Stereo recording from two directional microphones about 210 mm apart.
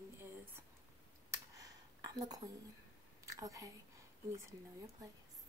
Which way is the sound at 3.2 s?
15° right (ahead or behind).